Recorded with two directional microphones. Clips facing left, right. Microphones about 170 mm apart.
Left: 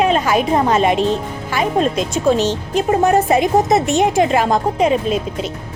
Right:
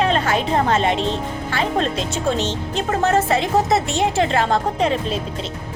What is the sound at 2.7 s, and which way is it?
A woman's voice, 15° left (ahead or behind).